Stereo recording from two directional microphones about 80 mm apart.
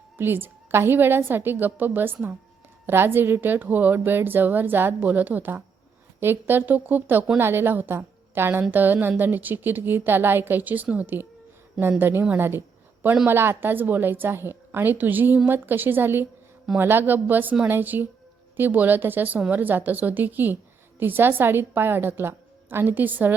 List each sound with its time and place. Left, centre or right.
0.2 s a woman's voice: right
12.4 s a sound: right
13.2 s a woman's voice: right